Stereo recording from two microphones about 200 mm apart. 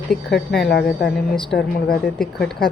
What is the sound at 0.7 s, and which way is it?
Speech, 55° left (ahead or behind).